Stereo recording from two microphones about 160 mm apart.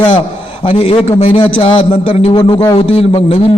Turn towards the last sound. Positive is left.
turn(degrees=40)  # may be behind; listen again after turning